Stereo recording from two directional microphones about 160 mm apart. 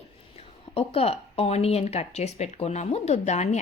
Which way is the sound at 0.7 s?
40° left (ahead or behind).